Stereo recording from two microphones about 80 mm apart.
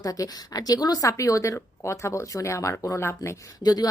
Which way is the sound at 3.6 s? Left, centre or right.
Left.